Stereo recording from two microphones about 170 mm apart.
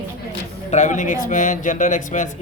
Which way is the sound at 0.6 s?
45° left (ahead or behind).